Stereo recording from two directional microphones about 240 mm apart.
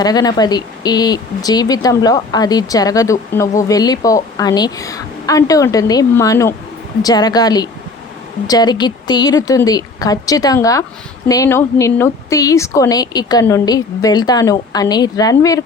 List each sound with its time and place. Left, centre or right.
0.0 s speech: centre